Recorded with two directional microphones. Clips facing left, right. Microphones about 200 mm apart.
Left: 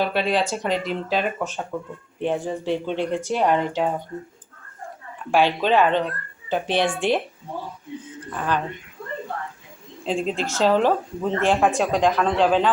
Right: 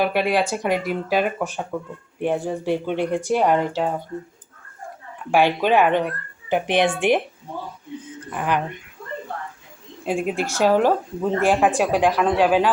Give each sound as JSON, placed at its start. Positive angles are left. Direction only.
{"t": 0.0, "sound": "speech", "side_deg": -10}
{"t": 5.3, "sound": "speech", "side_deg": -15}
{"t": 8.3, "sound": "speech", "side_deg": -15}
{"t": 10.0, "sound": "speech", "side_deg": -10}